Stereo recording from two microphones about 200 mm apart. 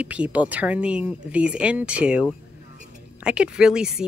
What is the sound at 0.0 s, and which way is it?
Speech, 5° right (ahead or behind).